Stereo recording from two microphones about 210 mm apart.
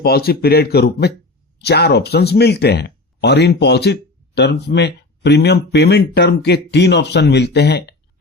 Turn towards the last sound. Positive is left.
turn(degrees=50)  # may be behind; listen again after turning